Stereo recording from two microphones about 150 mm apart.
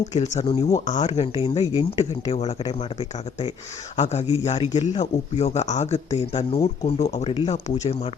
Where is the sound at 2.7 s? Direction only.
40° left (ahead or behind).